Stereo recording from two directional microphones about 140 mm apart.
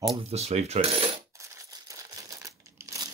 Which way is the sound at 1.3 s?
25° right (ahead or behind).